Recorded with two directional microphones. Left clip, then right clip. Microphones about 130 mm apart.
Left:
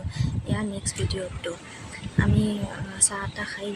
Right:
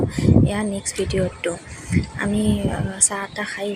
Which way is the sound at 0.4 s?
30° right (ahead or behind).